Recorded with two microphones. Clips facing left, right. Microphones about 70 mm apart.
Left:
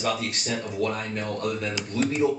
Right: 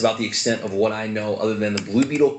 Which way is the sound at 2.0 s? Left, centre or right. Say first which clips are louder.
Right 6 dB; centre.